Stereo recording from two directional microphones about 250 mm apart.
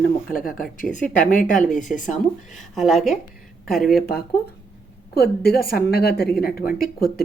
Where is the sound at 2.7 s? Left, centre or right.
Centre.